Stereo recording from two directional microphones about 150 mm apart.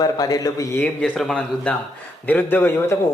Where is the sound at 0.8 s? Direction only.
5° left (ahead or behind).